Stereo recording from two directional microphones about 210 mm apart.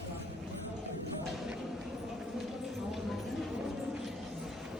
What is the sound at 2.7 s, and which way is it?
Clip-clop, centre (ahead or behind).